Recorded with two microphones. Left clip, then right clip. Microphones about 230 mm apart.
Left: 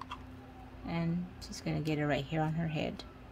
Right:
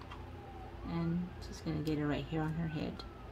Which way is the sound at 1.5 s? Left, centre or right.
Left.